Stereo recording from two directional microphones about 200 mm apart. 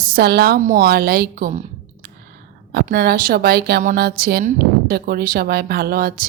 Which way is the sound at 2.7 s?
50° right (ahead or behind).